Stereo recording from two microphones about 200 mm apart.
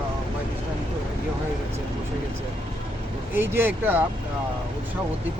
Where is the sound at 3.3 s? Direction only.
10° right (ahead or behind).